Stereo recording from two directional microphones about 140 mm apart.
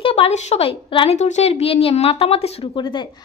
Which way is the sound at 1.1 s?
55° left (ahead or behind).